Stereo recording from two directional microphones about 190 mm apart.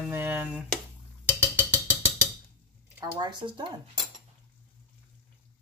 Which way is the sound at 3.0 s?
20° right (ahead or behind).